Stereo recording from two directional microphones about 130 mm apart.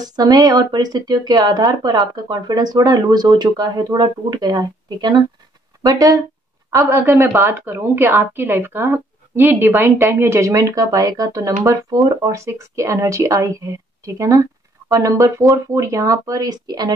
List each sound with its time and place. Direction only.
0.0 s a woman's voice: 30° right (ahead or behind)